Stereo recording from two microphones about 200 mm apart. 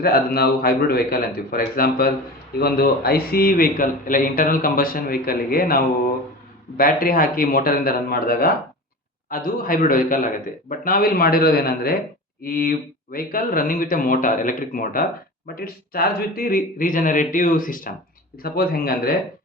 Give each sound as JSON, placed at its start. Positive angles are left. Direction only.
{"t": 0.0, "sound": "a man's voice", "side_deg": 50}